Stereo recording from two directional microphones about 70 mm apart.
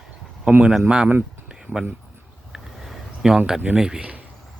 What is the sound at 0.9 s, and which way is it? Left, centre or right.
Speech, centre.